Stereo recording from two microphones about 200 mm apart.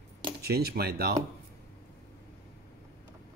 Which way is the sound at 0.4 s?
50° right (ahead or behind).